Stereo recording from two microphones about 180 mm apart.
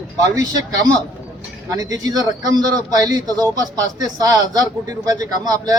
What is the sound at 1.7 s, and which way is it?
Speech, 20° right (ahead or behind).